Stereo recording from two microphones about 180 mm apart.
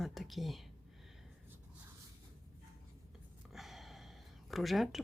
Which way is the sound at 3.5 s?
Centre (ahead or behind).